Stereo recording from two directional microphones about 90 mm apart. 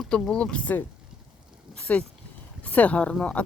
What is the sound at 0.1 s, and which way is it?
Speech, 10° left (ahead or behind).